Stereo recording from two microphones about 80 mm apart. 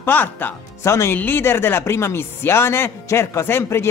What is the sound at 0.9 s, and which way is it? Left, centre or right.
Speech, left.